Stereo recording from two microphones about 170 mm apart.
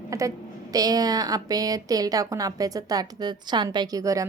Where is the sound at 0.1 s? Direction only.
20° right (ahead or behind).